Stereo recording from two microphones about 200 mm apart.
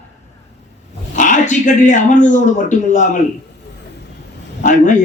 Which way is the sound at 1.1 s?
40° left (ahead or behind).